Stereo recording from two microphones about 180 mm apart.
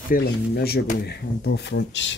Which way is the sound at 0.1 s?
60° left (ahead or behind).